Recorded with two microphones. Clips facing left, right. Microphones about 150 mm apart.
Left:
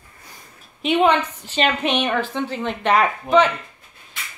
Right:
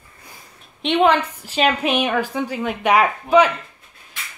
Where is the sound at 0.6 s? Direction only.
Centre (ahead or behind).